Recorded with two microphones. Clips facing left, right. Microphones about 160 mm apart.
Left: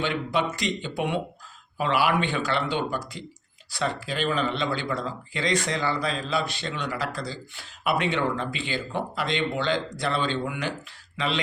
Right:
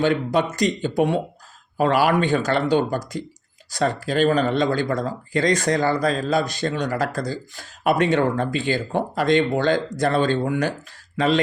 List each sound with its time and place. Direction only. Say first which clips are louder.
0.0 s speech: right 6 dB; 40° right (ahead or behind)